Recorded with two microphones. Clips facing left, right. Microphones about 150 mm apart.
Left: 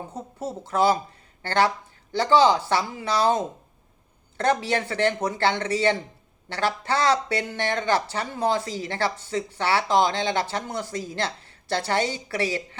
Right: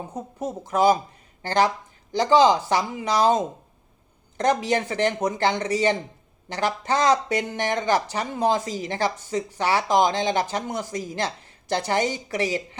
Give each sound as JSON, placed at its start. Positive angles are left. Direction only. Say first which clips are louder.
{"t": 0.1, "sound": "speech", "louder": "right 2 dB", "side_deg": -15}